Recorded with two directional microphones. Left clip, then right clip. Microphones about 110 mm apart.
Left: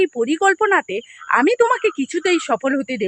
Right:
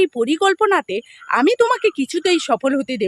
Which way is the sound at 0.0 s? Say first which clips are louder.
Even; 40° right (ahead or behind).